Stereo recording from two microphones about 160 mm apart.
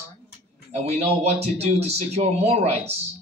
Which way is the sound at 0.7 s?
40° right (ahead or behind).